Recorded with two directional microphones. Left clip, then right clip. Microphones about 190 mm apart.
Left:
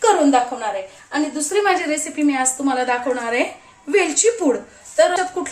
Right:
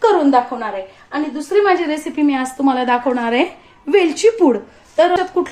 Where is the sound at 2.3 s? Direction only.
30° right (ahead or behind).